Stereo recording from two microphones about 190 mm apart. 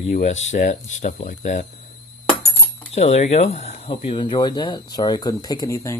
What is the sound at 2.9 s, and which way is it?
Speech, 35° left (ahead or behind).